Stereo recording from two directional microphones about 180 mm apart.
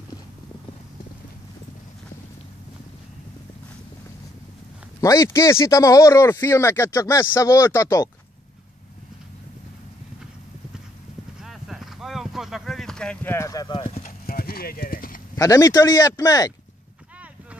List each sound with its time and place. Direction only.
5.0 s speech: 20° left (ahead or behind)
11.4 s clip-clop: centre (ahead or behind); by 14.0 s 30° left (ahead or behind)
14.0 s clip-clop: 55° left (ahead or behind)
15.3 s speech: 20° left (ahead or behind)